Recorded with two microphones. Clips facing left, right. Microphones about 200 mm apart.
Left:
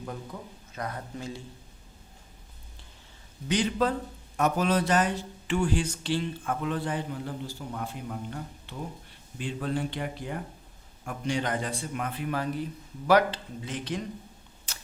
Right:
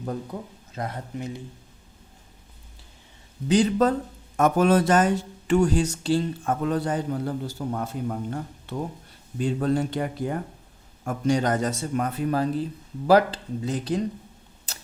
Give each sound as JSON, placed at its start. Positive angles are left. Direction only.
{"t": 0.7, "sound": "speech", "side_deg": -25}
{"t": 3.5, "sound": "a man's voice", "side_deg": -40}
{"t": 4.4, "sound": "a man's voice", "side_deg": -50}